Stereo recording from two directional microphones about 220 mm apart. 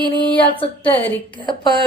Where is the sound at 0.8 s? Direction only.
10° left (ahead or behind).